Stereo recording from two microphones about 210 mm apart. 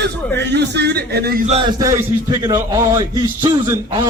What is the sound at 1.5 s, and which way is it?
A man's voice, 20° right (ahead or behind).